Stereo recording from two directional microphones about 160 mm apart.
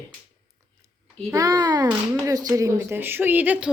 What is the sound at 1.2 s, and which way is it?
A woman's voice, 20° right (ahead or behind).